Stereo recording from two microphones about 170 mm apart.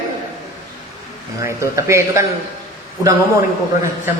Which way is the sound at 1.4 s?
15° right (ahead or behind).